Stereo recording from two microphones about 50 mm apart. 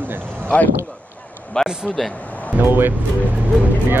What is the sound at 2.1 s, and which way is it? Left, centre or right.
Music, left.